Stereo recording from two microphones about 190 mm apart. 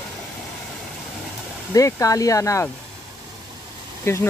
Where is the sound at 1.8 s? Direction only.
15° left (ahead or behind).